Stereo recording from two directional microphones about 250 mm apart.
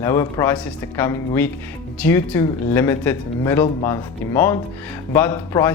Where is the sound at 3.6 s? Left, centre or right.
Centre.